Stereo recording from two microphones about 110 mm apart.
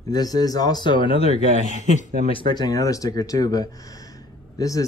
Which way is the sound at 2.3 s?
45° left (ahead or behind).